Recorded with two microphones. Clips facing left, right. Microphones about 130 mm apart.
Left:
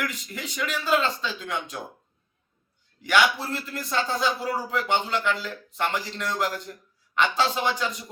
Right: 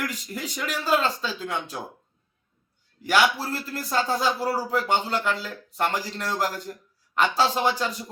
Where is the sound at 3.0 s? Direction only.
35° right (ahead or behind).